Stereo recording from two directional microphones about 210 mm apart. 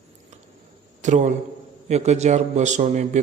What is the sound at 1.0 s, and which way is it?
Speech, 35° right (ahead or behind).